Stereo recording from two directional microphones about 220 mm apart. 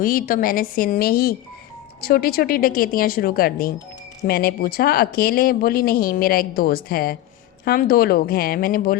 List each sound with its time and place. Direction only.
0.0 s speech: 40° left (ahead or behind)